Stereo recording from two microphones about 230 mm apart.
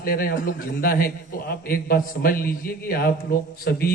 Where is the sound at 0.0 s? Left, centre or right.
Left.